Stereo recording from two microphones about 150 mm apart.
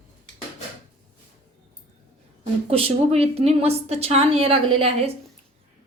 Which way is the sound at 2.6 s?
40° right (ahead or behind).